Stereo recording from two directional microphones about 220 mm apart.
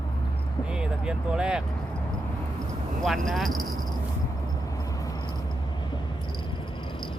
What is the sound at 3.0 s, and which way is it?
Speech, centre (ahead or behind).